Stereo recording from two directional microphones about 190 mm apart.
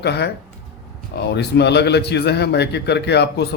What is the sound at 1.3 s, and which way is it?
A man's voice, 60° left (ahead or behind).